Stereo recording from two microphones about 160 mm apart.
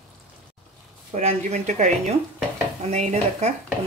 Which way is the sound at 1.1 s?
45° right (ahead or behind).